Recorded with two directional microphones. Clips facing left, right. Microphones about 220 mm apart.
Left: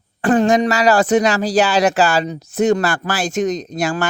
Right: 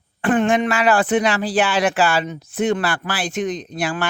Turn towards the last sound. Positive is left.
turn(degrees=45)  # may be behind; listen again after turning